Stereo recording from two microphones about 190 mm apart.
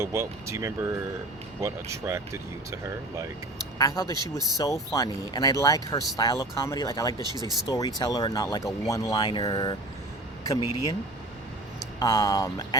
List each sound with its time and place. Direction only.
0.0 s speech: 15° right (ahead or behind)
3.8 s speech: 20° left (ahead or behind)
7.3 s speech: 20° right (ahead or behind)
7.7 s speech: 20° left (ahead or behind)
11.9 s speech: 20° left (ahead or behind)